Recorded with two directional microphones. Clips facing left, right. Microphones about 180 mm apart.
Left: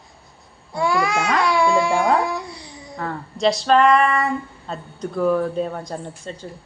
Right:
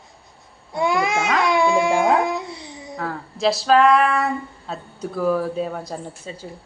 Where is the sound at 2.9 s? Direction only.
Centre (ahead or behind).